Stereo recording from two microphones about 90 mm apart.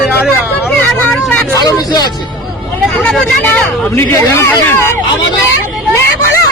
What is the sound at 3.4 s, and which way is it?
Speech, 25° left (ahead or behind).